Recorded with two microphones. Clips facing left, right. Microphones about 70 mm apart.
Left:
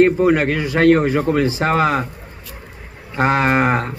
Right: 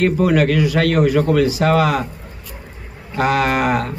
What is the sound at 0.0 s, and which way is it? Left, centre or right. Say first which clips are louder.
A man's voice: left 2 dB; left.